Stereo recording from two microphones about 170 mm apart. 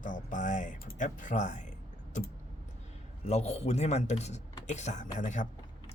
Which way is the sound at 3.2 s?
40° left (ahead or behind).